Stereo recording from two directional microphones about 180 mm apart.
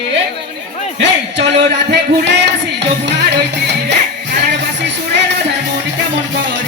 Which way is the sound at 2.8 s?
70° right (ahead or behind).